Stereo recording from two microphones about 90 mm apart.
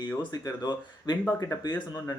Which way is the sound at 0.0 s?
55° left (ahead or behind).